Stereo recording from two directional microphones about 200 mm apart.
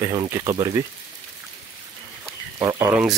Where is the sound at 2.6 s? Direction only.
15° right (ahead or behind).